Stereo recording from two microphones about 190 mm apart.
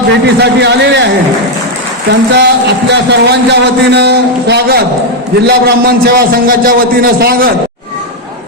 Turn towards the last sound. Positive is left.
turn(degrees=-55)  # may be behind; listen again after turning